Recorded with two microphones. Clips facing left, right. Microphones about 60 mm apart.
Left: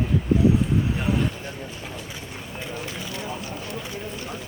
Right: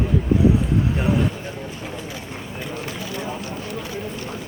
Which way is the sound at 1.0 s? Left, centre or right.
Centre.